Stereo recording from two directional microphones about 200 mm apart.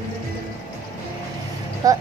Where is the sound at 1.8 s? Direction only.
20° right (ahead or behind).